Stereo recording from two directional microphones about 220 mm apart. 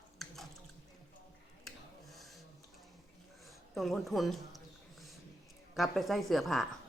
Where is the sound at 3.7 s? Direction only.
Centre (ahead or behind).